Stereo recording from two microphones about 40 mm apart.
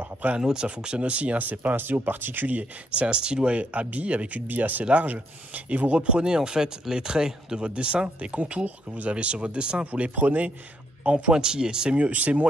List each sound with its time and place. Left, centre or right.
0.4 s speech: right
2.4 s speech: right
4.5 s speech: right
8.6 s speech: right
9.1 s speech: right
10.2 s speech: right
11.3 s speech: centre
12.0 s speech: right